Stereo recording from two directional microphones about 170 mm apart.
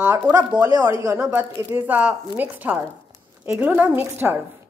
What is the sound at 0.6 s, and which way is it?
A woman's voice, 20° right (ahead or behind).